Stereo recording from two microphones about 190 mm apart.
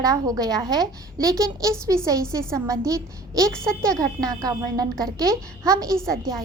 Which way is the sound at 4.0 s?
20° right (ahead or behind).